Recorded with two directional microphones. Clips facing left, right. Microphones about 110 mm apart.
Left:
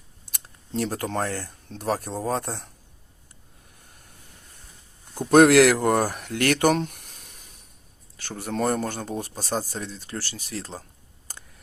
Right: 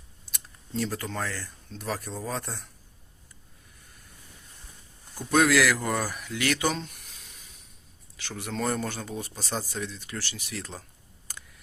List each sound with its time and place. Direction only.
0.8 s speech: 55° left (ahead or behind)
5.1 s speech: 60° left (ahead or behind)
8.4 s speech: 55° left (ahead or behind); by 10.8 s 35° left (ahead or behind)